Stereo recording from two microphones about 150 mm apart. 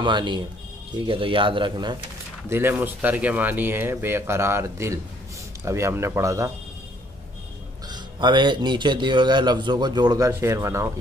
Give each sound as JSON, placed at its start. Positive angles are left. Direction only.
{"t": 0.0, "sound": "speech", "side_deg": -30}
{"t": 2.5, "sound": "a man's voice", "side_deg": -15}
{"t": 7.9, "sound": "a man's voice", "side_deg": -30}